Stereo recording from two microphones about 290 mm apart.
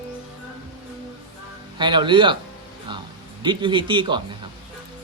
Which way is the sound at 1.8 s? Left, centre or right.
Centre.